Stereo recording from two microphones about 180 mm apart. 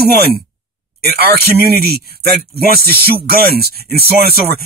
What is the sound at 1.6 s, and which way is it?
Speech, 60° right (ahead or behind).